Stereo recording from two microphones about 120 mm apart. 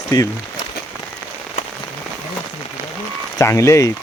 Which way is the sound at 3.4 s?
25° left (ahead or behind).